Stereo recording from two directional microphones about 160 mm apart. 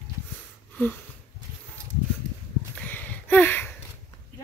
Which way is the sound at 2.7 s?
10° left (ahead or behind).